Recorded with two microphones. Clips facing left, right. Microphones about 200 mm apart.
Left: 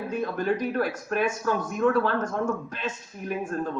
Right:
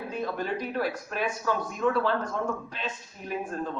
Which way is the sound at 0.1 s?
50° left (ahead or behind).